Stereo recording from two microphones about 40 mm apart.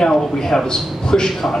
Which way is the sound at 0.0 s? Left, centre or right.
Centre.